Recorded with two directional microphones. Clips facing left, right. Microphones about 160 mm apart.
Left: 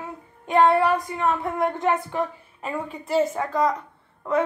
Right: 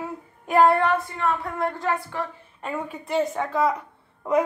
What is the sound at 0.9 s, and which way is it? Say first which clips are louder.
Speech: left 1 dB; 15° left (ahead or behind).